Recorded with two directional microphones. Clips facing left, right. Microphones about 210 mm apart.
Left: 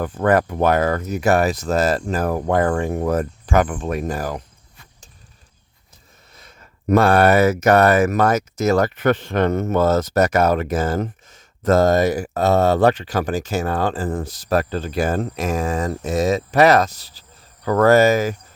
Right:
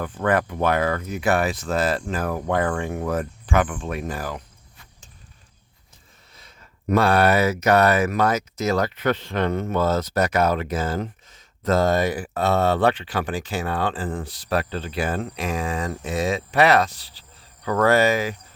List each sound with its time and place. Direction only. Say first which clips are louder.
0.0 s speech: left 5 dB; 40° left (ahead or behind)
6.3 s speech: left 4 dB; 50° left (ahead or behind)